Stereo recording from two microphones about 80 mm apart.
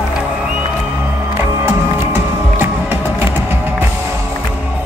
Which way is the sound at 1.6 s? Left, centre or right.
Right.